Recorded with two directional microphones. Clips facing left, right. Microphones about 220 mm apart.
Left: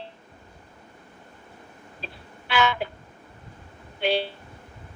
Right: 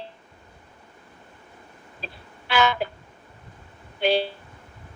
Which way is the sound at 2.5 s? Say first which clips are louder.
Right 2 dB; 40° right (ahead or behind).